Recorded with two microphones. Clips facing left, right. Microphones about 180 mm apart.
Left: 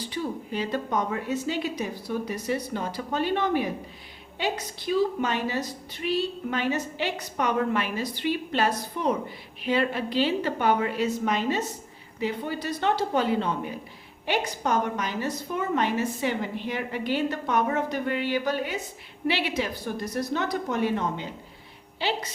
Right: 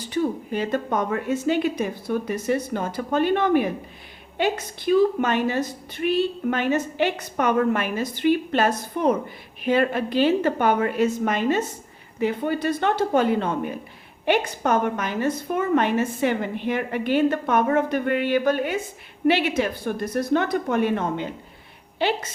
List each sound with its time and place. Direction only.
0.1 s a woman's voice: 55° right (ahead or behind)